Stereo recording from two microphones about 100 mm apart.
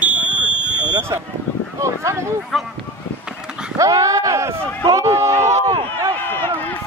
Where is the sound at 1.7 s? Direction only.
30° right (ahead or behind).